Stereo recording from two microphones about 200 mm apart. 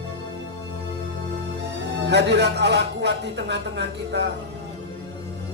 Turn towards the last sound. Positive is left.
turn(degrees=-60)  # may be behind; listen again after turning